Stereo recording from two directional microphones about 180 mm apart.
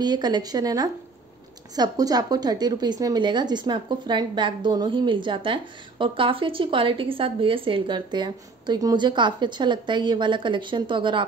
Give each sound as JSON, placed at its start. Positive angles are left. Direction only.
{"t": 0.0, "sound": "a woman's voice", "side_deg": -25}